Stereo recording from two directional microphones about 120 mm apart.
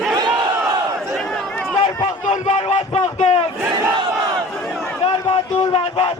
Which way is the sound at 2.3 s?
60° left (ahead or behind).